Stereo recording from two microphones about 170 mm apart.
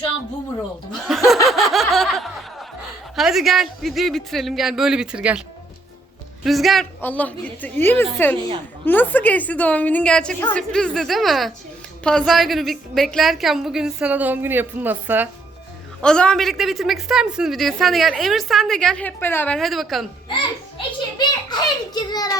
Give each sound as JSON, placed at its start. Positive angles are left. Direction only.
{"t": 1.0, "sound": "a woman's voice", "side_deg": 0}
{"t": 1.5, "sound": "snicker", "side_deg": 0}
{"t": 3.2, "sound": "a woman's voice", "side_deg": 0}
{"t": 6.4, "sound": "a woman's voice", "side_deg": 0}
{"t": 16.0, "sound": "a woman's voice", "side_deg": 5}
{"t": 19.5, "sound": "a woman's voice", "side_deg": 0}
{"t": 20.7, "sound": "a child's voice", "side_deg": 25}